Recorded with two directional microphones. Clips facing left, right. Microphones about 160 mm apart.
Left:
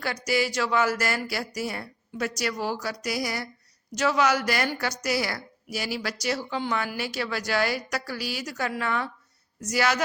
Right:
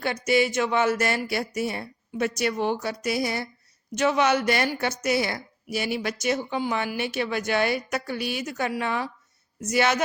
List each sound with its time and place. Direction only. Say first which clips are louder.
0.0 s speech: right 4 dB; 25° right (ahead or behind)